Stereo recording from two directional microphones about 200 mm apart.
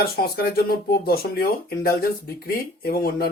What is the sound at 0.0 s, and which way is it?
Speech, 50° left (ahead or behind).